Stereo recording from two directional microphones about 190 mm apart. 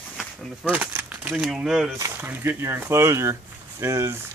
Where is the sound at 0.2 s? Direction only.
10° right (ahead or behind).